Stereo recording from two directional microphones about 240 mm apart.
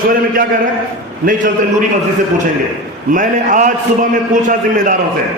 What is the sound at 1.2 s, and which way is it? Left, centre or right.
Speech, right.